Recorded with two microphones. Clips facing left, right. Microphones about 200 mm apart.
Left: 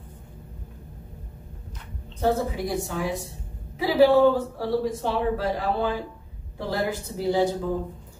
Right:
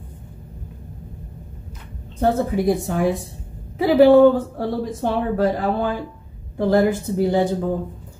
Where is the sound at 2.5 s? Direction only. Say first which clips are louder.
Right 8 dB; 55° right (ahead or behind).